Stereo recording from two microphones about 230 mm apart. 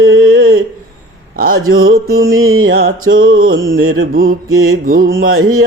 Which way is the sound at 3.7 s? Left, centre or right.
Right.